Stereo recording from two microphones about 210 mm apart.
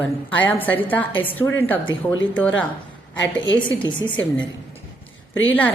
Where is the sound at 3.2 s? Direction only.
60° left (ahead or behind).